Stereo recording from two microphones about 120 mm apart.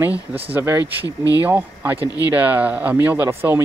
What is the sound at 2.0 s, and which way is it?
Speech, 30° left (ahead or behind).